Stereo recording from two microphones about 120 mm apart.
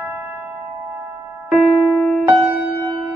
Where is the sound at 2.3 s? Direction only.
10° right (ahead or behind).